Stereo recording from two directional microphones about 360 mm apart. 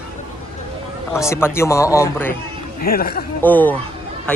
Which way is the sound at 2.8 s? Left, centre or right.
Left.